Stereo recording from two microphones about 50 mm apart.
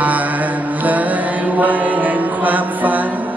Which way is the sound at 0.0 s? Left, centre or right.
Right.